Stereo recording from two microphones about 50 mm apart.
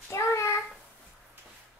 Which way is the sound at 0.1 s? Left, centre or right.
Left.